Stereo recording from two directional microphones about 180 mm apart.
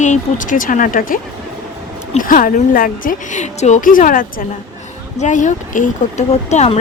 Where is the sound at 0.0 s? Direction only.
45° left (ahead or behind).